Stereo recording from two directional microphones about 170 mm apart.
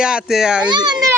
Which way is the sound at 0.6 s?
25° right (ahead or behind).